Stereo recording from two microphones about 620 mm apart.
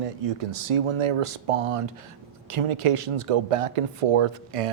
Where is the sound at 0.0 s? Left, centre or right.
Right.